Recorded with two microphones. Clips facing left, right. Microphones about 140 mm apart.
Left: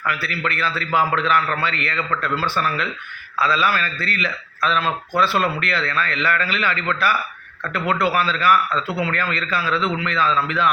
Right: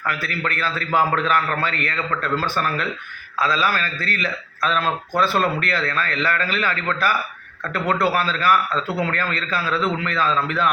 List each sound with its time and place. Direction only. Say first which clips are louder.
0.0 s a man's voice: left 1 dB; 45° right (ahead or behind)